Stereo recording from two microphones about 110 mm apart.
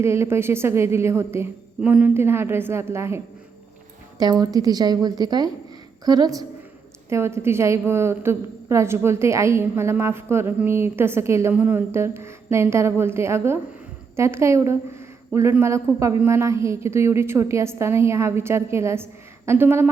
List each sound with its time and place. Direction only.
0.0 s a woman's voice: 25° right (ahead or behind)
4.2 s a woman's voice: 35° right (ahead or behind)
7.1 s a woman's voice: 25° right (ahead or behind)